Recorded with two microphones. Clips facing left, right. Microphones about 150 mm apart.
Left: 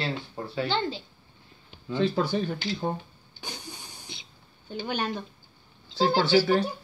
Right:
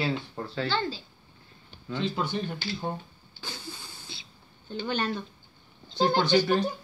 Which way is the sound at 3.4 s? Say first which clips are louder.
Even; 15° left (ahead or behind).